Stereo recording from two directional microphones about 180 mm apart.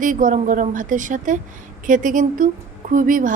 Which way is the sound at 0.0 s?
45° right (ahead or behind).